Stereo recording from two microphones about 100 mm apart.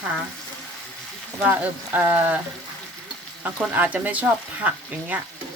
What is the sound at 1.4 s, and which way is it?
Speech, 15° right (ahead or behind).